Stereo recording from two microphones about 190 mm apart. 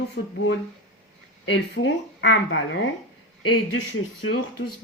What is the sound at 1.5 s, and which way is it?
A woman's voice, 65° left (ahead or behind).